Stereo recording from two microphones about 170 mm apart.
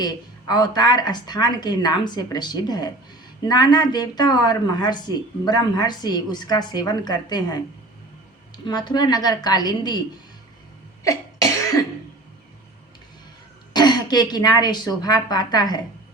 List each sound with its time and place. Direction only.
0.0 s speech: 25° left (ahead or behind)
11.0 s cough: 20° left (ahead or behind)
13.7 s speech: 25° left (ahead or behind)